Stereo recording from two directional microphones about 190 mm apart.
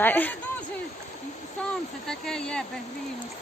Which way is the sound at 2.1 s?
5° left (ahead or behind).